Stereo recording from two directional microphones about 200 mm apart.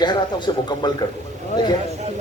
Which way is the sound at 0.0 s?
20° left (ahead or behind).